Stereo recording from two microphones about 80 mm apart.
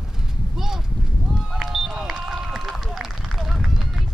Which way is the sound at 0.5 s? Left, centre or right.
Centre.